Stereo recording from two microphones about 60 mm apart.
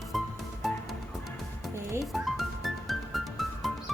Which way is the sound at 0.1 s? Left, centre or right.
Centre.